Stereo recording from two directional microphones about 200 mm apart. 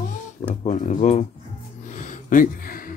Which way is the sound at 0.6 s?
40° left (ahead or behind).